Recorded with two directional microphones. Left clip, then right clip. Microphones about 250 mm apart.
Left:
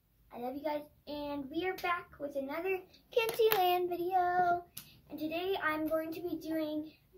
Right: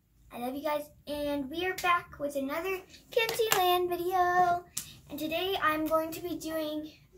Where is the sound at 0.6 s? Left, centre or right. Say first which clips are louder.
Right 7 dB; centre.